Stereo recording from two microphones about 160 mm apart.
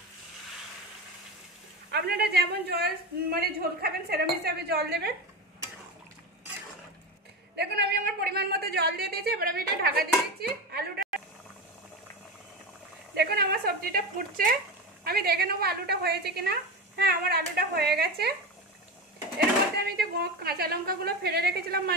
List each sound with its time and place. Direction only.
1.9 s a woman's voice: 85° right
7.5 s a woman's voice: 75° right (ahead or behind)
13.1 s a woman's voice: 80° right; by 14.6 s 60° right (ahead or behind)
15.0 s a woman's voice: 75° right (ahead or behind)
19.3 s a woman's voice: 80° right